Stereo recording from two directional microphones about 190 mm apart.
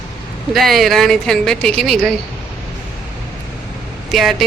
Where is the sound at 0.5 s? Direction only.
Centre (ahead or behind).